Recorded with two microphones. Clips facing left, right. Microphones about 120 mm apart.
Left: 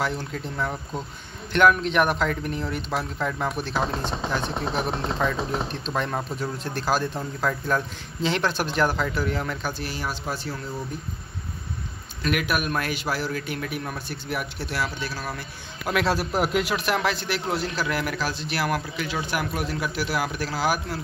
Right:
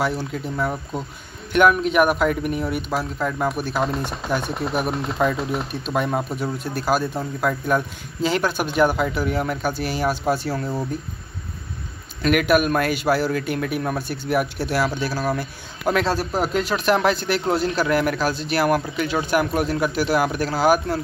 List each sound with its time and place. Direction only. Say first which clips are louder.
0.0 s speech: right 4 dB; 5° right (ahead or behind)
9.8 s speech: right 9 dB; 65° right (ahead or behind)
12.4 s speech: right 9 dB; 60° right (ahead or behind); by 16.0 s 30° right (ahead or behind)
16.2 s speech: right 2 dB; 5° left (ahead or behind)
16.8 s speech: right 6 dB; 40° right (ahead or behind)